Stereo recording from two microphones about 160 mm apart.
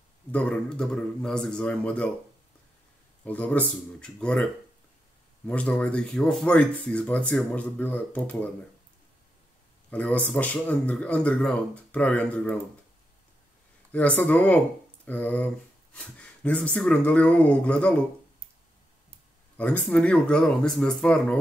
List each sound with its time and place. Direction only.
0.3 s speech: 5° left (ahead or behind)
3.3 s speech: 10° left (ahead or behind)
5.5 s speech: 10° left (ahead or behind)
9.8 s speech: 10° left (ahead or behind)
13.9 s speech: 10° left (ahead or behind)
19.5 s speech: 10° left (ahead or behind)